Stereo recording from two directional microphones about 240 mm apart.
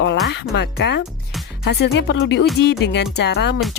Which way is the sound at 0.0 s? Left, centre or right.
Left.